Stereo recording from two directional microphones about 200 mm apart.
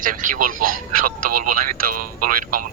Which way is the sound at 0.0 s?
45° right (ahead or behind).